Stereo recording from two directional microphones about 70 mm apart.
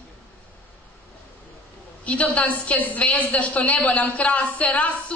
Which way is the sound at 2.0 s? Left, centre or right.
Centre.